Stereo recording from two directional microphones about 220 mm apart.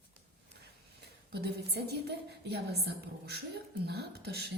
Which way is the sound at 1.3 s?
50° right (ahead or behind).